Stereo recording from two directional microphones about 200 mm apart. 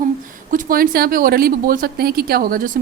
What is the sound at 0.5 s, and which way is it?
Speech, 45° right (ahead or behind).